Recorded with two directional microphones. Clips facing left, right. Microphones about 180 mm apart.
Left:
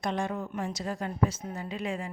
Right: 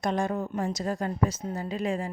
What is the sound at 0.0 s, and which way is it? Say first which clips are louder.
A woman's voice: right 4 dB; 40° right (ahead or behind).